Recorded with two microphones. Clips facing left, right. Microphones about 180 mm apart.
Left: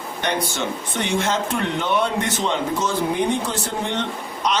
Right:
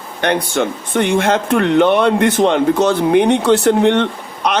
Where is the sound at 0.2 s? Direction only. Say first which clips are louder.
Right 8 dB; 60° right (ahead or behind).